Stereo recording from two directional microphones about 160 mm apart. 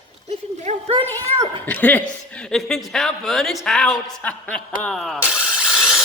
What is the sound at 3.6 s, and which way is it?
Rub, 5° left (ahead or behind).